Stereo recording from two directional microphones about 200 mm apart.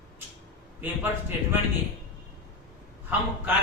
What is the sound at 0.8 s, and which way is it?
Speech, 10° right (ahead or behind).